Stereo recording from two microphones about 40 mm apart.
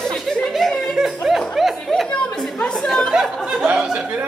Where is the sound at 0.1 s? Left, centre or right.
Centre.